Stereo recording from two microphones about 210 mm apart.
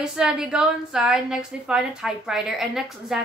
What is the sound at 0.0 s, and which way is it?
A woman's voice, 5° right (ahead or behind).